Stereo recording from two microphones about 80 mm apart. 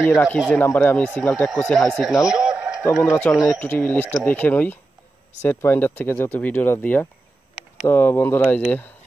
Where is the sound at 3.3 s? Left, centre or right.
Left.